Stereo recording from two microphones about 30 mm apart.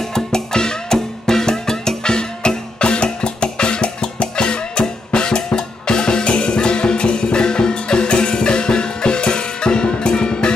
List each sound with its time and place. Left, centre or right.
0.1 s music: left